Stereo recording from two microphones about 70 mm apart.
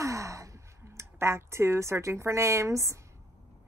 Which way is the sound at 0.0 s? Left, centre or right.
Right.